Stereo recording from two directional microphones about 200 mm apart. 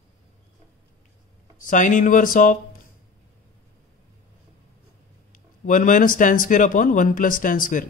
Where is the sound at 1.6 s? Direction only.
40° left (ahead or behind).